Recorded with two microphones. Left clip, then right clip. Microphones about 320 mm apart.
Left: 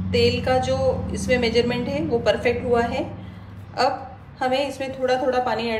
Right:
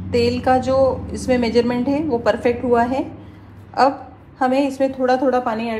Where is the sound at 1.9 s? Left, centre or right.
Right.